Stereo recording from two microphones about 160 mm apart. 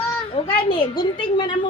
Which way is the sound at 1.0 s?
30° left (ahead or behind).